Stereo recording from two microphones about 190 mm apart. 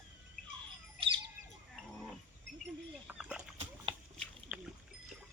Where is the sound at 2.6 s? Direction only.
5° right (ahead or behind).